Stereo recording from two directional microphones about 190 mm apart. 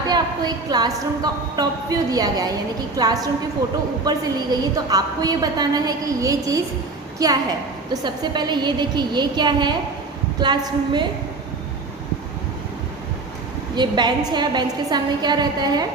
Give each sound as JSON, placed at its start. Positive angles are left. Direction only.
{"t": 0.1, "sound": "a woman's voice", "side_deg": -20}
{"t": 13.7, "sound": "a woman's voice", "side_deg": -25}